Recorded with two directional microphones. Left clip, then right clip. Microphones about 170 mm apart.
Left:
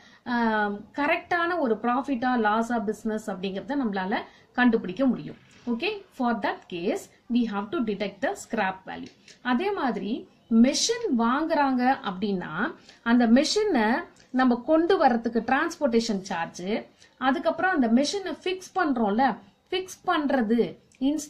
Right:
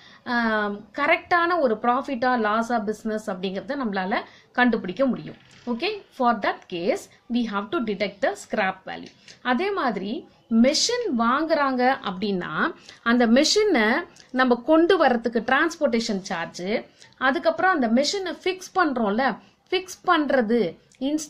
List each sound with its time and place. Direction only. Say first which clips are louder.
0.2 s a woman's voice: right 2 dB; 15° right (ahead or behind)